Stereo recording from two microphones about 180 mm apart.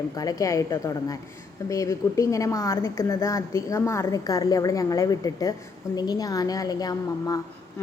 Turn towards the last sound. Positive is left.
turn(degrees=20)  # may be behind; listen again after turning